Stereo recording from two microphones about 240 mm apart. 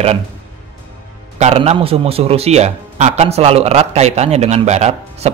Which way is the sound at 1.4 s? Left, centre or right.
Right.